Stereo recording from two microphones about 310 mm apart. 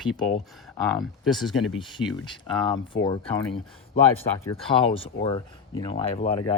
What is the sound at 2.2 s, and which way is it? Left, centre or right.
Speech, centre.